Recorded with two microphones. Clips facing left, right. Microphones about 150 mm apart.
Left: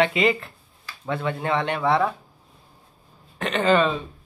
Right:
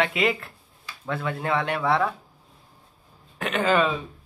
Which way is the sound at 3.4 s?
5° right (ahead or behind).